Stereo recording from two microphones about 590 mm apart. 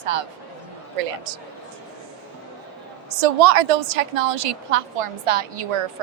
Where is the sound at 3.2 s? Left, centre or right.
Right.